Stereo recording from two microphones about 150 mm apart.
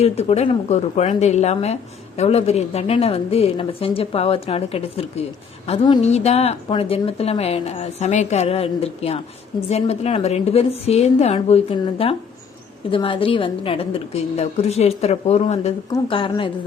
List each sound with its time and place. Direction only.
0.0 s a woman's voice: 45° left (ahead or behind)